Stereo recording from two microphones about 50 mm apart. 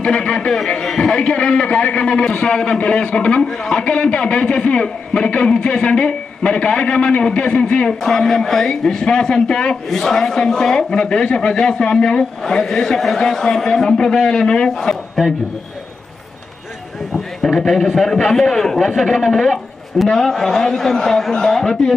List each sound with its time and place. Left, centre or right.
0.0 s a man's voice: centre
8.0 s a man's voice: centre
17.1 s a man's voice: centre